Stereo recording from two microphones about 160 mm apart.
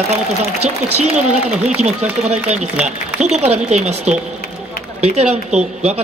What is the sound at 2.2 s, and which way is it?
A man's voice, 45° right (ahead or behind).